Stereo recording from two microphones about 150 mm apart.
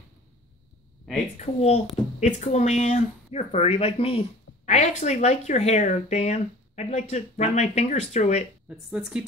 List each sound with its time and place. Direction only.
1.4 s speech: 45° left (ahead or behind)
8.6 s speech: 5° right (ahead or behind)